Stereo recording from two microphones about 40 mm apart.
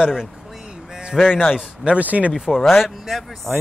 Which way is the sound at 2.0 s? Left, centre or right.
Right.